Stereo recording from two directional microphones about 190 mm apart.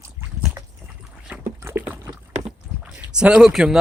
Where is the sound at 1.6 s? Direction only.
10° right (ahead or behind).